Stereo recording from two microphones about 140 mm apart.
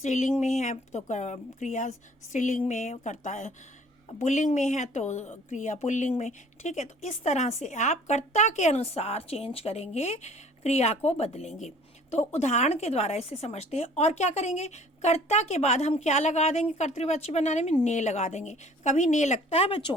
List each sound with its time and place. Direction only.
0.0 s speech: 60° left (ahead or behind); by 19.9 s 45° left (ahead or behind)